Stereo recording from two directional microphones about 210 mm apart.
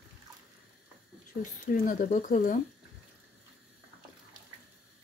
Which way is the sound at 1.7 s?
40° left (ahead or behind).